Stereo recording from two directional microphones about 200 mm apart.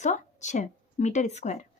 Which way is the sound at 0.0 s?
35° left (ahead or behind).